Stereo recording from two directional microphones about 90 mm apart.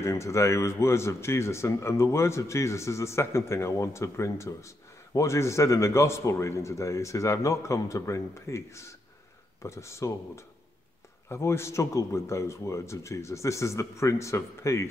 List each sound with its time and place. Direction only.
0.0 s a man's voice: 30° left (ahead or behind)